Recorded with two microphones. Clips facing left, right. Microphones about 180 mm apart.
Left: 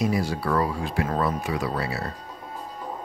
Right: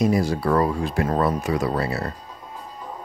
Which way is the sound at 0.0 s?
45° right (ahead or behind).